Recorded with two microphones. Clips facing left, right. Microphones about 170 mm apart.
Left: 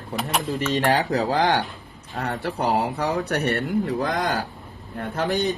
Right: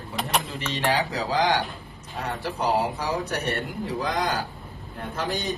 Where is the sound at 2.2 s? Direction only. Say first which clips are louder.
Left 3 dB; 60° left (ahead or behind).